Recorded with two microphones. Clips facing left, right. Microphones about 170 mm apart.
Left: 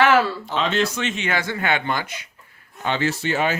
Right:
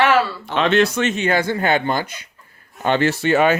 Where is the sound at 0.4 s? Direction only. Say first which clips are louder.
Right 5 dB; 65° right (ahead or behind).